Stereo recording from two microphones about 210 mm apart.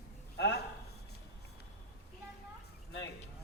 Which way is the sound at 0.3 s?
55° left (ahead or behind).